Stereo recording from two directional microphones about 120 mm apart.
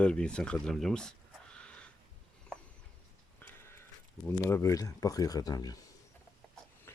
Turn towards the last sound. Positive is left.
turn(degrees=35)  # may be behind; listen again after turning